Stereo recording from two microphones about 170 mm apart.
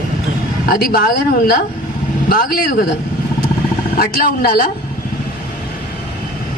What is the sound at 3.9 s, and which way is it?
Speech, 60° left (ahead or behind).